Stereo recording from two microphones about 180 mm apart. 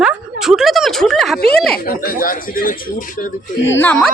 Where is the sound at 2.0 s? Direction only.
50° left (ahead or behind).